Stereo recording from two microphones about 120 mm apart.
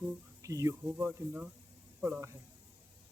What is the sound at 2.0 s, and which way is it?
Speech, 20° right (ahead or behind).